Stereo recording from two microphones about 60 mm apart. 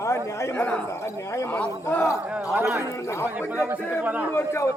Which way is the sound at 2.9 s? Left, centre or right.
Left.